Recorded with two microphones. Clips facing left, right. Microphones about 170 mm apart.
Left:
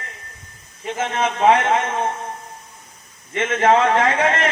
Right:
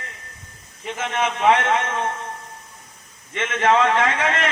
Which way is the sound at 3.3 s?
35° left (ahead or behind).